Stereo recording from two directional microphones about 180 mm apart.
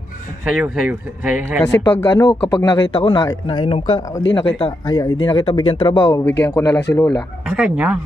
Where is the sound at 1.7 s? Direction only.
20° left (ahead or behind).